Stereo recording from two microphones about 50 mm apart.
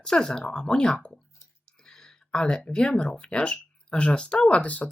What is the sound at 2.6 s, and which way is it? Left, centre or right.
Speech, centre.